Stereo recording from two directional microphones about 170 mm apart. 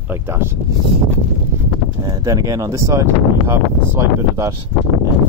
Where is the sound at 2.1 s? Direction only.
20° right (ahead or behind).